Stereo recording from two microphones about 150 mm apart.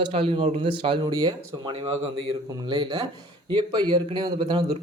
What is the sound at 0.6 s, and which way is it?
A man's voice, 35° right (ahead or behind).